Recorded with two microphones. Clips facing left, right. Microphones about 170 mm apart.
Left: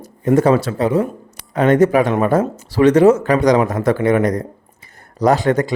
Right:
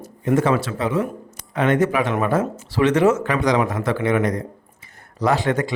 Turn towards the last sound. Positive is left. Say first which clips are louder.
# left 5 dB
turn(degrees=40)  # may be behind; listen again after turning